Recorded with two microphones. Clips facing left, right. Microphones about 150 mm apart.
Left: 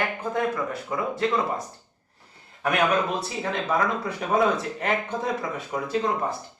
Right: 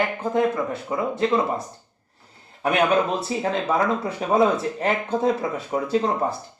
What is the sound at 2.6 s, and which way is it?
Speech, 30° right (ahead or behind).